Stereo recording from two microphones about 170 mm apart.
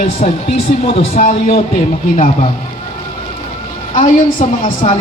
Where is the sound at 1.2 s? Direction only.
55° left (ahead or behind).